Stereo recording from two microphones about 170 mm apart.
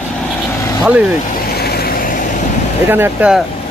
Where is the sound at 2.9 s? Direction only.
10° right (ahead or behind).